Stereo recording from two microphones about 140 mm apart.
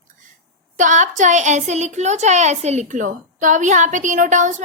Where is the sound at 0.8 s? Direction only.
65° right (ahead or behind).